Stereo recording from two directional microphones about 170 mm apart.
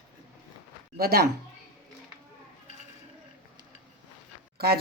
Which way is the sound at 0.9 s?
65° right (ahead or behind).